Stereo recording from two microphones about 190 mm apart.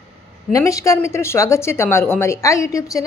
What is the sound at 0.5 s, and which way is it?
A woman's voice, 15° left (ahead or behind).